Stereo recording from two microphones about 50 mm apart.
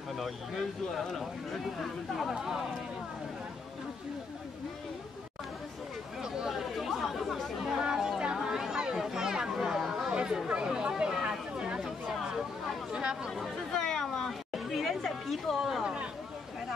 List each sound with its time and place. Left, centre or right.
0.2 s speech: centre
2.3 s speech: centre
6.5 s chatter: centre
7.8 s a sound: centre
10.1 s chatter: centre
11.8 s a sound: centre
12.9 s speech: centre
13.7 s chatter: centre
15.8 s a sound: centre